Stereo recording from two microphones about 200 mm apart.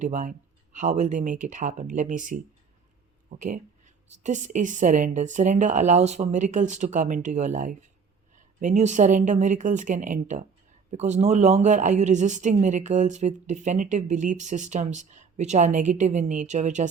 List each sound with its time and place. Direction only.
0.0 s speech: 40° right (ahead or behind)